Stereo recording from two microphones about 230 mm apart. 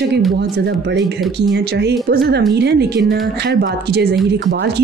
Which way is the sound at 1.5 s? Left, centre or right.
Right.